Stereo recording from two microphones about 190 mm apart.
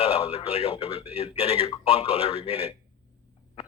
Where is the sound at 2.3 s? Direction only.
30° right (ahead or behind).